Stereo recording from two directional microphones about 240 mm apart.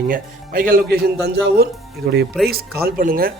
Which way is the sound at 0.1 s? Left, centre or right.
Right.